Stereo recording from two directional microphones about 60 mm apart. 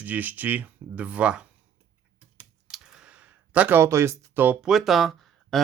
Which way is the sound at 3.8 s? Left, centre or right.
Right.